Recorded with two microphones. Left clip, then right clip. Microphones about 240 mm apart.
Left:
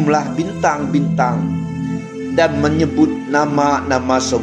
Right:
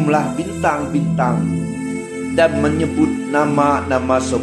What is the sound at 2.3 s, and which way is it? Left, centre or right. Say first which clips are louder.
Speech: even; centre.